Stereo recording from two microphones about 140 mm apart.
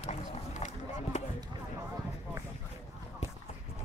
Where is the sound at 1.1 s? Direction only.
55° left (ahead or behind).